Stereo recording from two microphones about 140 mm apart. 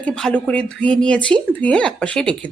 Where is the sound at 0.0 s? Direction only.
5° left (ahead or behind).